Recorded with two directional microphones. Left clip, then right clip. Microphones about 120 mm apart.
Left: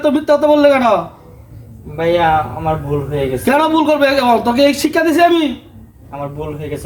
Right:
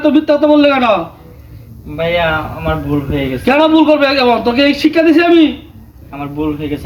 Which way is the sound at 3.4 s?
45° left (ahead or behind).